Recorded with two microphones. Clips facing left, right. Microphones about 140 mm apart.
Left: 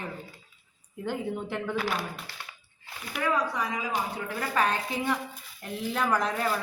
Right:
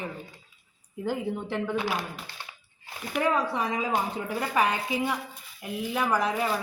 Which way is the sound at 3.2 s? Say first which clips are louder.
Right 2 dB; 25° right (ahead or behind).